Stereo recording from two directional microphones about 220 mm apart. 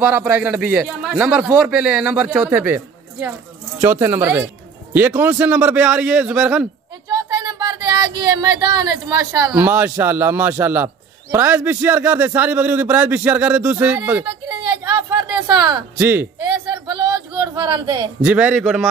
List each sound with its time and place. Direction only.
0.0 s a man's voice: 5° right (ahead or behind)
7.1 s a man's voice: 20° right (ahead or behind)
14.2 s a sound: 20° right (ahead or behind)
16.0 s a man's voice: 10° right (ahead or behind)
16.5 s a sound: 20° right (ahead or behind)
18.2 s a man's voice: 5° right (ahead or behind)